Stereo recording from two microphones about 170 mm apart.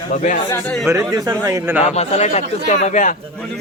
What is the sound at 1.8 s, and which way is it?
A man's voice, 40° left (ahead or behind).